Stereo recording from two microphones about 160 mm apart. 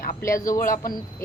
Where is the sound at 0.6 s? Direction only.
60° left (ahead or behind).